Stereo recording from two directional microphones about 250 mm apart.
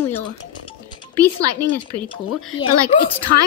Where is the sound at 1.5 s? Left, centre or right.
Centre.